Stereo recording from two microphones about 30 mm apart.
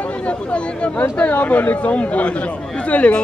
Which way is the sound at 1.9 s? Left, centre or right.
Left.